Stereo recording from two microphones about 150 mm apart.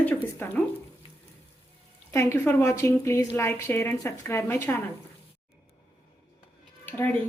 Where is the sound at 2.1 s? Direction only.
15° left (ahead or behind).